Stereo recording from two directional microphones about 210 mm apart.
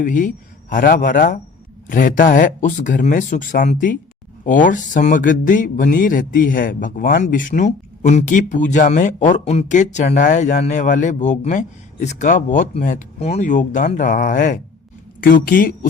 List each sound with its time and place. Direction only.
0.0 s speech: 40° left (ahead or behind)